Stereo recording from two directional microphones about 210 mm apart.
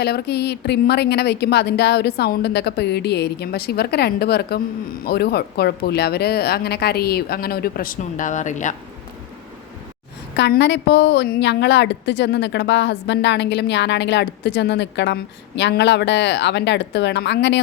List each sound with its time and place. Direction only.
0.0 s a woman's voice: 50° left (ahead or behind)
10.3 s a woman's voice: 55° left (ahead or behind)